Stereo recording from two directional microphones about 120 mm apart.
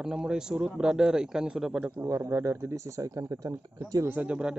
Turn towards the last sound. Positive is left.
turn(degrees=-10)  # may be behind; listen again after turning